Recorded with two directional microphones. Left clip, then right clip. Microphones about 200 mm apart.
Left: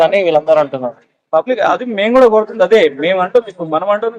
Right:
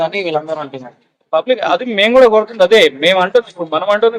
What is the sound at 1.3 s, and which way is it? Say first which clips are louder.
Speech: left 1 dB; 5° left (ahead or behind).